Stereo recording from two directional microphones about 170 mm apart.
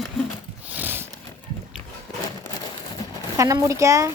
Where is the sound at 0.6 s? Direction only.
10° right (ahead or behind).